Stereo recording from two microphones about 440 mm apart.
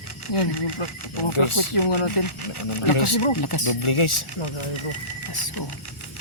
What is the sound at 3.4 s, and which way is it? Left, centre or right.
Speech, left.